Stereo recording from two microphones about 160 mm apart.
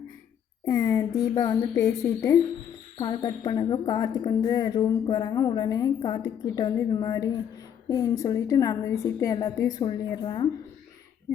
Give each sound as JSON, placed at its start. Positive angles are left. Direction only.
{"t": 0.7, "sound": "a woman's voice", "side_deg": 20}